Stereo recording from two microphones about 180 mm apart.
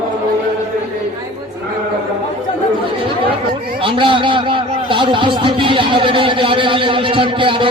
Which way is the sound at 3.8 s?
30° right (ahead or behind).